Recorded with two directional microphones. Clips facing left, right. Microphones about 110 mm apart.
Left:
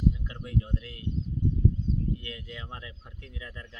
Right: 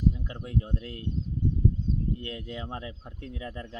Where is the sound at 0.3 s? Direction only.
35° right (ahead or behind).